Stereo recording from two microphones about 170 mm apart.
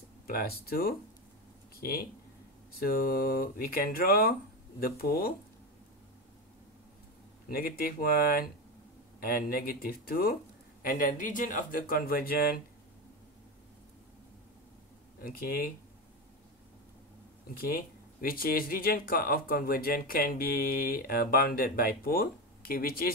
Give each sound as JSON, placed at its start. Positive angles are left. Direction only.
{"t": 0.3, "sound": "speech", "side_deg": 60}
{"t": 7.4, "sound": "speech", "side_deg": 60}
{"t": 15.1, "sound": "speech", "side_deg": 60}
{"t": 17.6, "sound": "speech", "side_deg": 60}